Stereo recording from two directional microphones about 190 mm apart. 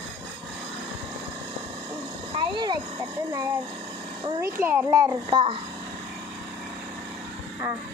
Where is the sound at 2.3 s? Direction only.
25° right (ahead or behind).